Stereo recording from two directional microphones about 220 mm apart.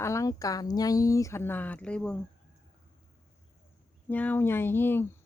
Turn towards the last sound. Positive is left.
turn(degrees=10)  # may be behind; listen again after turning